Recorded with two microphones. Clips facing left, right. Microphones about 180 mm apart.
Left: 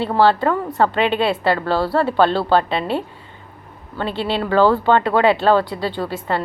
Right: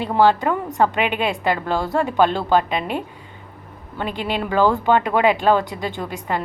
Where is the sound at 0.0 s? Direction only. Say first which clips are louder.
Left 1 dB; 15° right (ahead or behind).